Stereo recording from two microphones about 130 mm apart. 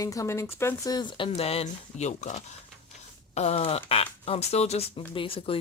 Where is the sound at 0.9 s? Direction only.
40° left (ahead or behind).